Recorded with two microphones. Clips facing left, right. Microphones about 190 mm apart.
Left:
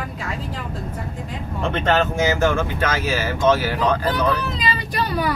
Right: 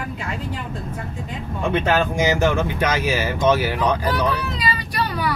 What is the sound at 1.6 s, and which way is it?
Speech, 10° right (ahead or behind).